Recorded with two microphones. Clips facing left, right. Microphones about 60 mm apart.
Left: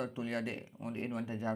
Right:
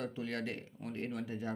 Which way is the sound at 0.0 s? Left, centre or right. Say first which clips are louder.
Left 2 dB; left.